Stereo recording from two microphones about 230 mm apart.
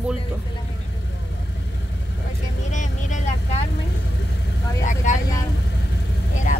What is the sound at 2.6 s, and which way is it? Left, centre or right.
Vehicle, left.